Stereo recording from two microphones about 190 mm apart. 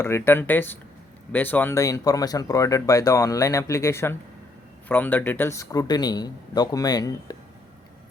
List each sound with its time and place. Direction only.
0.0 s speech: 10° left (ahead or behind)